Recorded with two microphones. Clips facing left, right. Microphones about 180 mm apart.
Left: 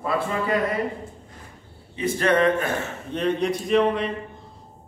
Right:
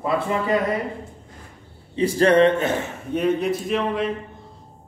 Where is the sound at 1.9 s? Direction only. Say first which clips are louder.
Right 5 dB; 30° right (ahead or behind).